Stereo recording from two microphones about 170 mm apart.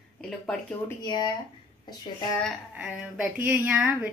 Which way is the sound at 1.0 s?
25° left (ahead or behind).